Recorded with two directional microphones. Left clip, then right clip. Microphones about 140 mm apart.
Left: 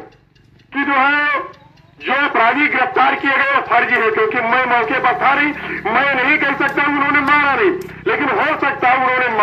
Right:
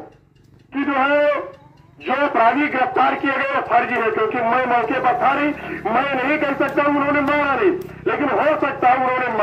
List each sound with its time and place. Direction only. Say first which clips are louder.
0.7 s goat: left 3 dB; 40° right (ahead or behind)
2.2 s a man's voice: left 2 dB; 35° right (ahead or behind)